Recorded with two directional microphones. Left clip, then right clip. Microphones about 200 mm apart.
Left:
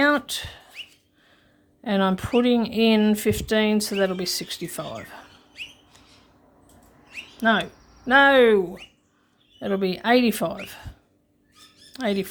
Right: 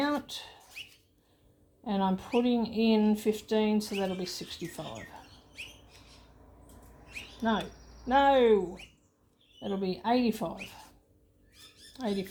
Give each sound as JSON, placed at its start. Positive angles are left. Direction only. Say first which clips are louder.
{"t": 0.0, "sound": "speech", "louder": "left 11 dB", "side_deg": 40}
{"t": 1.8, "sound": "speech", "louder": "left 8 dB", "side_deg": 40}
{"t": 7.4, "sound": "speech", "louder": "left 10 dB", "side_deg": 40}
{"t": 11.9, "sound": "speech", "louder": "left 9 dB", "side_deg": 40}